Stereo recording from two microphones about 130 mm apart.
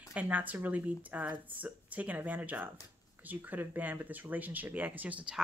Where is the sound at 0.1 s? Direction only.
10° right (ahead or behind).